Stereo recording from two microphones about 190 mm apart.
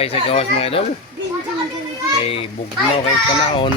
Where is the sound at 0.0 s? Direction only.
30° left (ahead or behind).